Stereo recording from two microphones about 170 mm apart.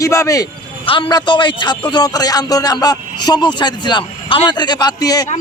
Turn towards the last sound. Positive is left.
turn(degrees=20)  # may be behind; listen again after turning